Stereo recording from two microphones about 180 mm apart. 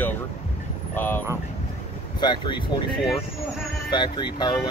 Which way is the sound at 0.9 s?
10° left (ahead or behind).